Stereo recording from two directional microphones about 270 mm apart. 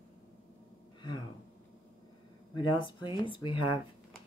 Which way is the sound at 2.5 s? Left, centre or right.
Centre.